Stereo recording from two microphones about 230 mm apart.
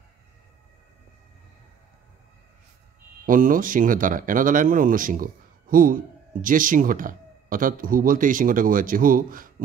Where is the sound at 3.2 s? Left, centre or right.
Right.